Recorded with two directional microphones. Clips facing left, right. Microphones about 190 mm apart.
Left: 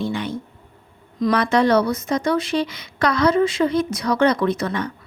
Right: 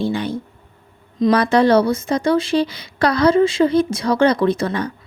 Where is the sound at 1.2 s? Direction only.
35° right (ahead or behind).